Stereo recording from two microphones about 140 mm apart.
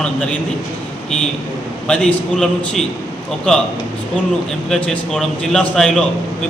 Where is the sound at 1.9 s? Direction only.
5° left (ahead or behind).